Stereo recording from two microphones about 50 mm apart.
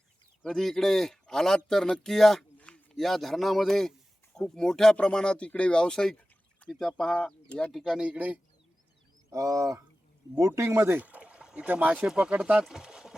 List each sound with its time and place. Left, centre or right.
0.4 s speech: centre
2.6 s a sound: centre
3.0 s speech: centre; by 7.7 s left
7.7 s speech: centre
7.9 s speech: right
9.3 s a sound: right
10.3 s speech: right
10.9 s boat: right
11.7 s speech: right
12.0 s speech: centre
12.6 s a sound: centre